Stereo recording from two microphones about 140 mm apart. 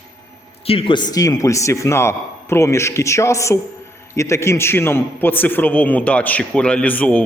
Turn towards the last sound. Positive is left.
turn(degrees=10)  # may be behind; listen again after turning